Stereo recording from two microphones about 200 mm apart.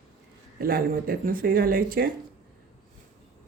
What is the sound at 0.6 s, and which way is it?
Speech, 45° right (ahead or behind).